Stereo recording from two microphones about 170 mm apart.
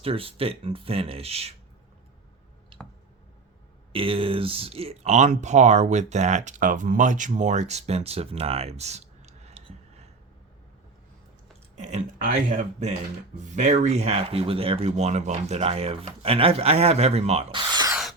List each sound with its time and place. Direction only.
0.0 s speech: 35° right (ahead or behind)
2.7 s a sound: 30° right (ahead or behind)
3.9 s speech: 30° right (ahead or behind)
11.8 s speech: 45° right (ahead or behind); by 17.9 s 25° right (ahead or behind)